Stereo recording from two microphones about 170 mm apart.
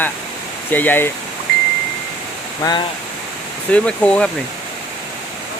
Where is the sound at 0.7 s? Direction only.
10° left (ahead or behind).